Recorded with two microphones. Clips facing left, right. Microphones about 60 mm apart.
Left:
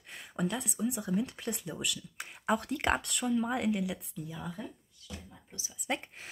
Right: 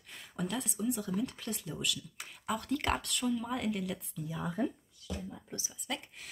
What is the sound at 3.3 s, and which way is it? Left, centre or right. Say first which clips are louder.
Speech: left 5 dB; left.